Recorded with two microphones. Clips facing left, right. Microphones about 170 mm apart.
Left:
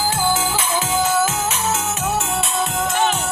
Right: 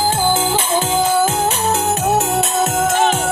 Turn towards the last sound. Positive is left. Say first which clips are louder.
# right 4 dB
turn(degrees=-50)  # may be behind; listen again after turning